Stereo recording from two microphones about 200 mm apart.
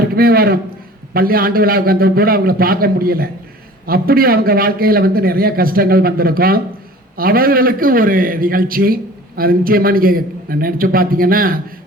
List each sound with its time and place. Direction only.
0.2 s a man's voice: 50° right (ahead or behind)